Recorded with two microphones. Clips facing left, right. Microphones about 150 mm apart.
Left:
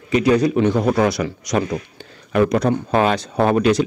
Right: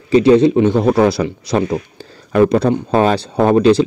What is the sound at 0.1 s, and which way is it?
Speech, 30° right (ahead or behind).